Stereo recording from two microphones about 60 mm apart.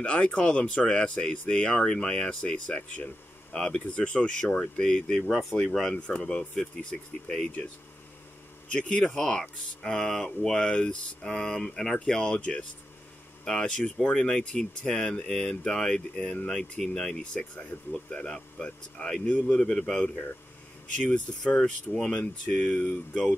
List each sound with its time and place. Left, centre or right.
0.0 s speech: centre
8.6 s speech: centre
14.0 s speech: centre